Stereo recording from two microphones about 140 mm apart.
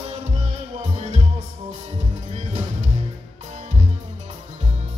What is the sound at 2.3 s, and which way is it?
Music, 55° right (ahead or behind).